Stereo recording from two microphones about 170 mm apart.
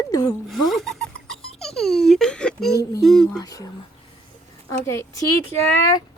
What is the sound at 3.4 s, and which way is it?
Speech, 20° left (ahead or behind).